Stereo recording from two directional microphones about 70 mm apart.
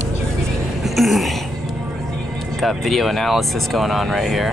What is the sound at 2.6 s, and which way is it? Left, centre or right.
Speech, centre.